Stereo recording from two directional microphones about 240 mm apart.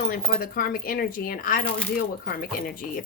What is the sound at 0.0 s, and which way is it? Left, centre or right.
Speech, left.